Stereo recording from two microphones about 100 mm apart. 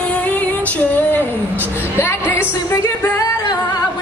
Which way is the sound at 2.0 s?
25° left (ahead or behind).